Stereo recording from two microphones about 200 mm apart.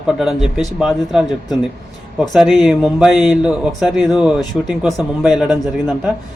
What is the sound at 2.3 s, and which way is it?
Speech, centre (ahead or behind).